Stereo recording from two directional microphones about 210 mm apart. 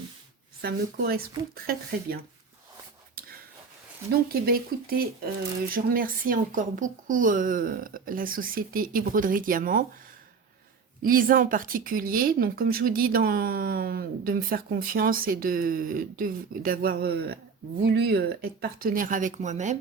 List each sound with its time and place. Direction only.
0.6 s speech: 45° right (ahead or behind)
4.1 s speech: 45° right (ahead or behind)
11.0 s speech: 40° right (ahead or behind)